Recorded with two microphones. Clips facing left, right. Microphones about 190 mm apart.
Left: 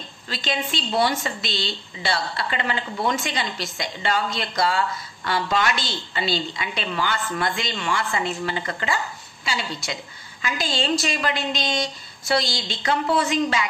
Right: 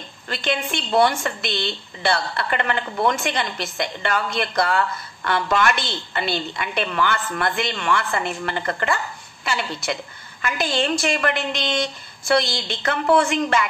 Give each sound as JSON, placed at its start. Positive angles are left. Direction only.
{"t": 0.3, "sound": "a woman's voice", "side_deg": -55}